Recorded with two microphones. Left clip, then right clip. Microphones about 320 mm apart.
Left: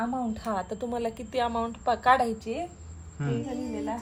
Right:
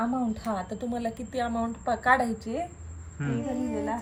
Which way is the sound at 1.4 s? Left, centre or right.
Centre.